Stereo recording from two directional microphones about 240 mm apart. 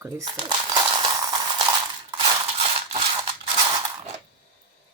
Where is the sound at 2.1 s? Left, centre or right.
Right.